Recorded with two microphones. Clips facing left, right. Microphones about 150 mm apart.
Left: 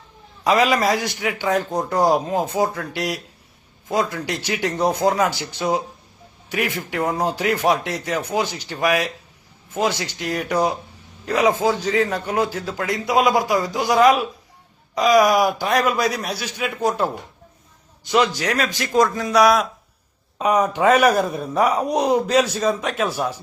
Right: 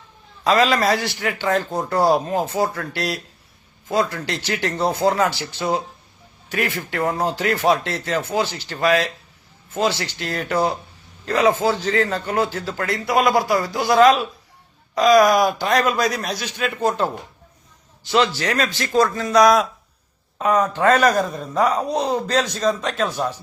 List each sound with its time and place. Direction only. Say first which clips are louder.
0.4 s speech: even; 15° left (ahead or behind)
18.1 s speech: even; 15° left (ahead or behind)